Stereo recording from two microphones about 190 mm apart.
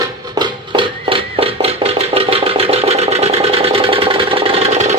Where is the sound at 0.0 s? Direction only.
25° right (ahead or behind).